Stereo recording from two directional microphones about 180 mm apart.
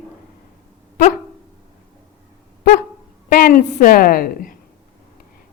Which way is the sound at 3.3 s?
50° left (ahead or behind).